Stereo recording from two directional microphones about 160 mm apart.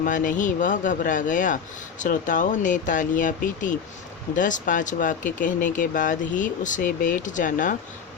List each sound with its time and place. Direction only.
0.0 s speech: 55° left (ahead or behind)